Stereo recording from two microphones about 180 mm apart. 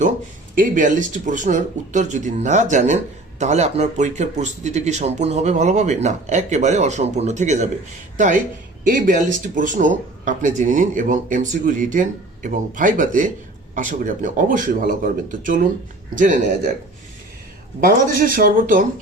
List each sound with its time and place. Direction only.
0.5 s speech: 45° right (ahead or behind)
8.8 s speech: 50° right (ahead or behind)
17.7 s speech: 50° right (ahead or behind)